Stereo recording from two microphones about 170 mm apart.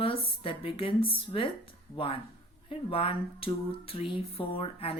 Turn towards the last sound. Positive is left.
turn(degrees=30)  # may be behind; listen again after turning